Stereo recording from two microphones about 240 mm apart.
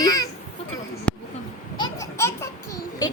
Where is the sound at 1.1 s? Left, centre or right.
Centre.